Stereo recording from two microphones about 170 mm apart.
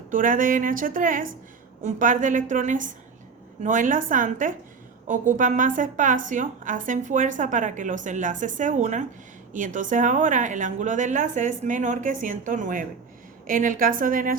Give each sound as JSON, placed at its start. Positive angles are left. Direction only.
{"t": 0.1, "sound": "a woman's voice", "side_deg": -50}